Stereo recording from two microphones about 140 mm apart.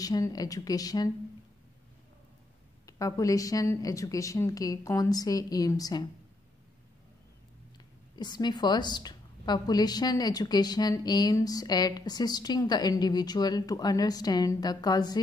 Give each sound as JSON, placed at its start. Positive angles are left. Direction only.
{"t": 0.0, "sound": "a woman's voice", "side_deg": 25}
{"t": 2.9, "sound": "a woman's voice", "side_deg": 25}
{"t": 8.2, "sound": "a woman's voice", "side_deg": 30}